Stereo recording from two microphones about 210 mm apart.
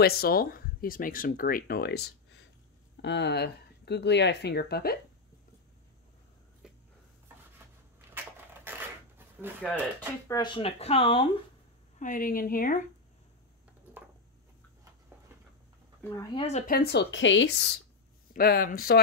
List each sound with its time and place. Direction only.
0.0 s speech: 45° left (ahead or behind)
6.6 s a sound: 5° right (ahead or behind)
8.2 s a sound: 10° right (ahead or behind)
9.7 s speech: 10° left (ahead or behind); by 11.2 s 25° left (ahead or behind)
12.0 s speech: 40° left (ahead or behind)
16.0 s speech: 10° left (ahead or behind)
16.3 s speech: 30° left (ahead or behind); by 17.6 s 65° left (ahead or behind)
18.3 s speech: 45° left (ahead or behind)